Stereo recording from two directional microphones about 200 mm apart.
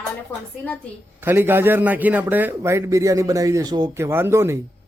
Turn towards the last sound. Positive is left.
turn(degrees=-15)  # may be behind; listen again after turning